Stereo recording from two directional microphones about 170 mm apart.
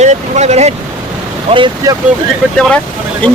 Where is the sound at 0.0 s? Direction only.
40° right (ahead or behind).